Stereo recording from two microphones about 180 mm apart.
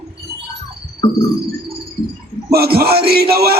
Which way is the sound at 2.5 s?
60° right (ahead or behind).